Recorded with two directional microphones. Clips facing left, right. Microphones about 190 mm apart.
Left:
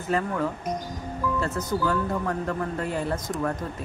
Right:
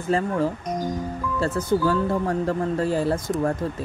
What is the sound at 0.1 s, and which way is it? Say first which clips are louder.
Speech: right 2 dB; 30° right (ahead or behind).